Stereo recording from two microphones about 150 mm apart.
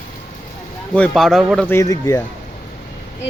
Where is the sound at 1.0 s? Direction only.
Centre (ahead or behind).